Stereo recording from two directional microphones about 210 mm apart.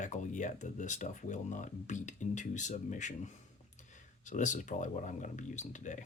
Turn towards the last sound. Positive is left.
turn(degrees=35)  # may be behind; listen again after turning